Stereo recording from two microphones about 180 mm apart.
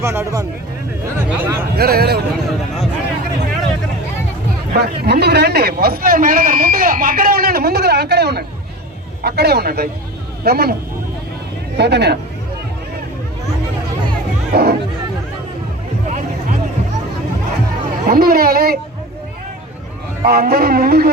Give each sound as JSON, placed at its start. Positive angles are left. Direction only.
{"t": 0.0, "sound": "speech", "side_deg": -15}
{"t": 1.7, "sound": "a man's voice", "side_deg": -60}
{"t": 4.7, "sound": "a man's voice", "side_deg": -65}
{"t": 11.8, "sound": "speech", "side_deg": -65}
{"t": 14.5, "sound": "a sound", "side_deg": -60}
{"t": 18.0, "sound": "a man's voice", "side_deg": -55}
{"t": 20.2, "sound": "a man's voice", "side_deg": -60}